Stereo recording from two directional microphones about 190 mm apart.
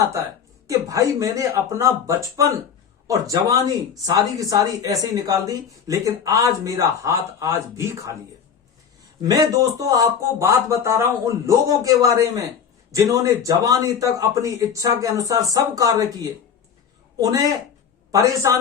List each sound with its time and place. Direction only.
0.7 s a man's voice: 15° right (ahead or behind)
9.2 s a man's voice: 20° right (ahead or behind)